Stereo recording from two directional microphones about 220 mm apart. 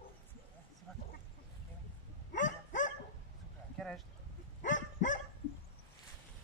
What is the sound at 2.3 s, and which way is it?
Dog, 35° left (ahead or behind).